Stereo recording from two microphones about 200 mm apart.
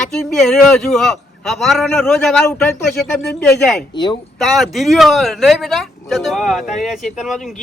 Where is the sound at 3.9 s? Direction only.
25° left (ahead or behind).